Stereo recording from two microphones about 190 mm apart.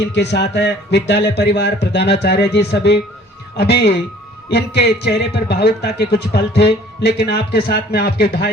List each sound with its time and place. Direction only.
0.1 s speech: 65° left (ahead or behind)